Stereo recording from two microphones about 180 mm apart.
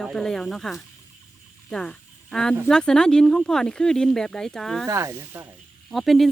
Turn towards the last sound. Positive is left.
turn(degrees=0)  # may be behind; listen again after turning